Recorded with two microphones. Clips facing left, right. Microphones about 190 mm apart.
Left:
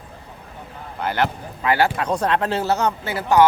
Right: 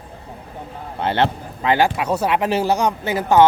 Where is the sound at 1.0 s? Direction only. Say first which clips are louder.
Right 3 dB; 25° right (ahead or behind).